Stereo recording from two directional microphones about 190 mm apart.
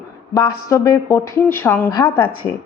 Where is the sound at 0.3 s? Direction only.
15° left (ahead or behind).